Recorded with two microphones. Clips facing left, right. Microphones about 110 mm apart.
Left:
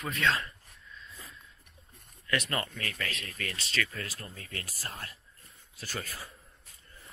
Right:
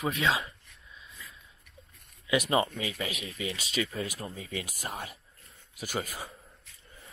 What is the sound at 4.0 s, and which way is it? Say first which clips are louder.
Speech: right 6 dB; 25° right (ahead or behind).